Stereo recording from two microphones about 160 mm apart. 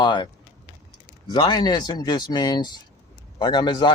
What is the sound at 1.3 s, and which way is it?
Speech, 30° left (ahead or behind).